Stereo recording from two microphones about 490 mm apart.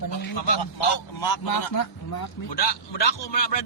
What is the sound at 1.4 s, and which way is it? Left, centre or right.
Speech, left.